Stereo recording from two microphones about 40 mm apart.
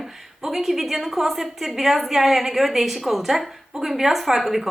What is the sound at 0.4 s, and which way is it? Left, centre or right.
A woman's voice, centre.